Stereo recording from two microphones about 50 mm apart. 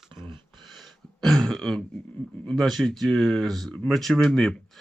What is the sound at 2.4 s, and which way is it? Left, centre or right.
Speech, centre.